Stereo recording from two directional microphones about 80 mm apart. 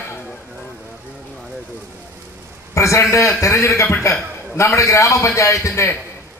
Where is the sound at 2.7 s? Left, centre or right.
Left.